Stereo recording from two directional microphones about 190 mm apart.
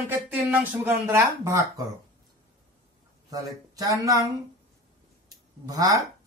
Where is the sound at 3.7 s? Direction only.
20° right (ahead or behind).